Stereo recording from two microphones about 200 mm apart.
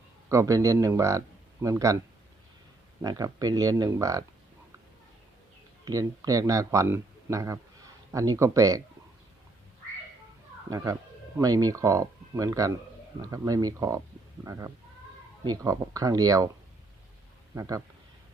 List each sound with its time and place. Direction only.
0.3 s speech: 15° right (ahead or behind)
3.0 s speech: 20° right (ahead or behind)
5.8 s speech: 15° right (ahead or behind)
10.7 s speech: 15° right (ahead or behind)
17.5 s speech: 15° right (ahead or behind)